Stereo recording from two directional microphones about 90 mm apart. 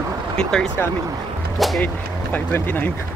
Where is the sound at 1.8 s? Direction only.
20° left (ahead or behind).